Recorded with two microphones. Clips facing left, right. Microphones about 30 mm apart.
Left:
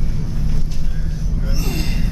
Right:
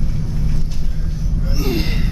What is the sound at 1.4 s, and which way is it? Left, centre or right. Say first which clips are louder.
Gasp: right 5 dB; centre.